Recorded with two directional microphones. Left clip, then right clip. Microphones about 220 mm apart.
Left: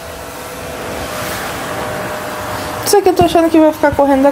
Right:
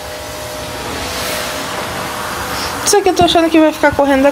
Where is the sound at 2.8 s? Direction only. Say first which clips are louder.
Left 1 dB; 20° left (ahead or behind).